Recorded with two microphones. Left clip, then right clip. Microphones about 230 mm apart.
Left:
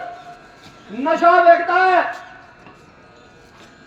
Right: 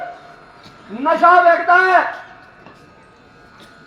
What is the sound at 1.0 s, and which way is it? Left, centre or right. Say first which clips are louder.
Speech: right 1 dB; right.